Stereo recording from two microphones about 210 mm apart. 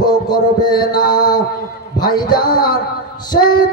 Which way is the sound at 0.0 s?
20° left (ahead or behind).